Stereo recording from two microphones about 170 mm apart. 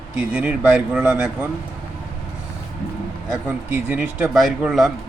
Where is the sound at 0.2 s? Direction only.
10° right (ahead or behind).